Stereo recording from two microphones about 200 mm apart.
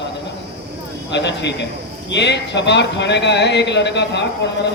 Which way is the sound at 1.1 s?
60° left (ahead or behind).